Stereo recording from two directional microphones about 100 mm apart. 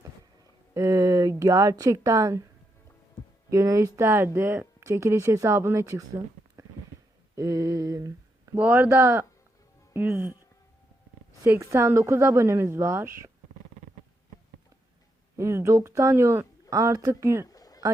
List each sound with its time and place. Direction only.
0.7 s speech: 30° right (ahead or behind)
3.5 s speech: 35° right (ahead or behind)
7.3 s speech: 35° right (ahead or behind)
8.5 s speech: 20° right (ahead or behind)
11.4 s speech: 30° right (ahead or behind)
15.4 s speech: 25° right (ahead or behind)
17.4 s a sound: 35° left (ahead or behind)